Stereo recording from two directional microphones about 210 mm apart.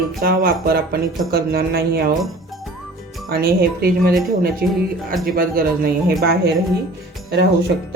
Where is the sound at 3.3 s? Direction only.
45° right (ahead or behind).